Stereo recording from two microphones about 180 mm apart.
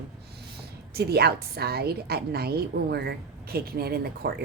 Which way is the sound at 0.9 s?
60° right (ahead or behind).